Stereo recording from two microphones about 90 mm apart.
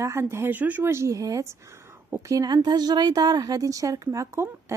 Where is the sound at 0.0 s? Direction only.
30° right (ahead or behind).